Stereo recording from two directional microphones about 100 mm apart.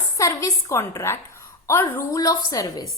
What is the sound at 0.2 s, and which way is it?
A woman's voice, 30° left (ahead or behind).